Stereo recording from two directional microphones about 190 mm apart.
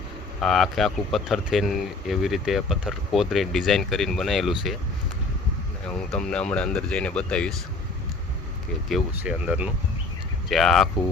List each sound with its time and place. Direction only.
0.4 s speech: centre (ahead or behind)
6.0 s speech: 5° left (ahead or behind)
8.9 s speech: 5° right (ahead or behind)